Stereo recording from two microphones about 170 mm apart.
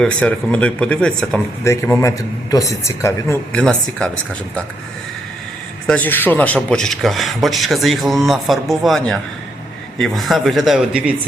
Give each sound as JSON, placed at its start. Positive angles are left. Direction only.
{"t": 0.0, "sound": "speech", "side_deg": 5}
{"t": 1.6, "sound": "speech", "side_deg": 15}
{"t": 5.9, "sound": "a man's voice", "side_deg": 10}